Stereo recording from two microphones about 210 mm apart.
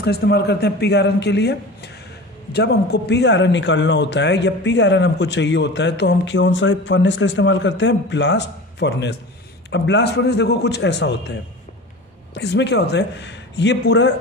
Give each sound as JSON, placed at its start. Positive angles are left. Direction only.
{"t": 0.0, "sound": "a man's voice", "side_deg": 50}
{"t": 12.4, "sound": "speech", "side_deg": 55}